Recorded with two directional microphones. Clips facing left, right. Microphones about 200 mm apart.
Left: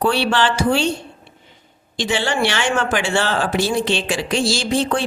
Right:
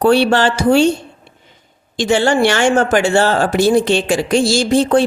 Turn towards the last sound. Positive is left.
turn(degrees=-45)  # may be behind; listen again after turning